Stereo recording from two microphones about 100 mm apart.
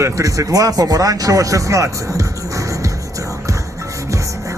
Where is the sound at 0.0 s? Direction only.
35° right (ahead or behind).